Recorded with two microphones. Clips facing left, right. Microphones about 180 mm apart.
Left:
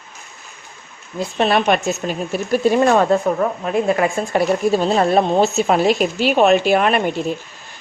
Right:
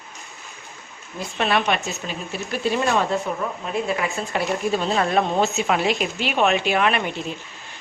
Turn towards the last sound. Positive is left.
turn(degrees=45)  # may be behind; listen again after turning